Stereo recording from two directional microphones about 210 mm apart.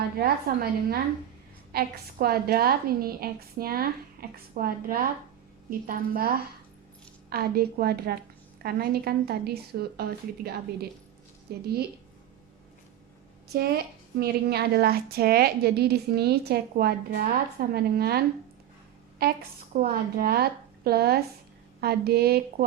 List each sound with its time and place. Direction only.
0.2 s a woman's voice: 45° right (ahead or behind)
13.5 s a woman's voice: 45° right (ahead or behind)
19.7 s a woman's voice: 45° right (ahead or behind)